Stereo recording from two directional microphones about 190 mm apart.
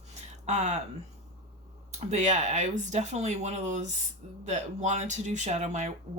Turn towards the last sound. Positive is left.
turn(degrees=-40)  # may be behind; listen again after turning